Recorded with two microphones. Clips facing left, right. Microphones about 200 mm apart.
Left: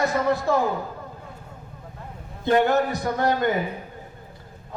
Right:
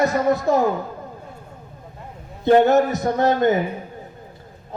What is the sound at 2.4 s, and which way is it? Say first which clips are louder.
A man's voice: right 5 dB; 20° right (ahead or behind).